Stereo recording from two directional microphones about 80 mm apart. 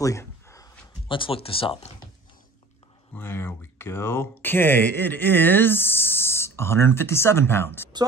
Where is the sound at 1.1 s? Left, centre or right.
Left.